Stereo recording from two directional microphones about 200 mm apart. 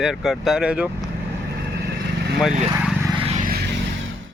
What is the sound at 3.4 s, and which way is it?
Vehicle, 50° right (ahead or behind).